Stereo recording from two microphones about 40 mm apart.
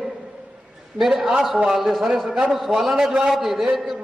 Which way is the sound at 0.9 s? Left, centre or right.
Centre.